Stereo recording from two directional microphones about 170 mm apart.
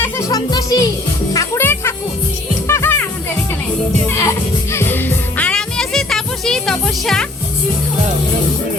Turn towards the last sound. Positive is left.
turn(degrees=5)  # may be behind; listen again after turning